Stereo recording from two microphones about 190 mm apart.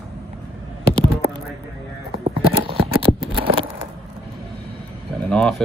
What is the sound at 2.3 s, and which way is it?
Horse, 30° right (ahead or behind).